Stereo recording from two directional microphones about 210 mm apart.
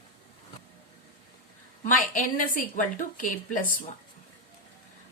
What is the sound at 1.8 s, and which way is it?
A woman's voice, 40° left (ahead or behind).